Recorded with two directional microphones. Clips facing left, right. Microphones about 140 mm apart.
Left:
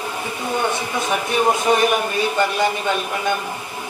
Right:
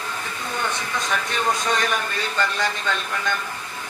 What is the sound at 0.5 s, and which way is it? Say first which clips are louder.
A man's voice: left 5 dB; 15° left (ahead or behind).